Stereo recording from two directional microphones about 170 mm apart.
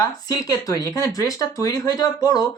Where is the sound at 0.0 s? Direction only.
20° left (ahead or behind).